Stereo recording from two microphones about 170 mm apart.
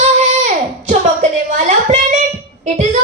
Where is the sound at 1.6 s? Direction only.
45° right (ahead or behind).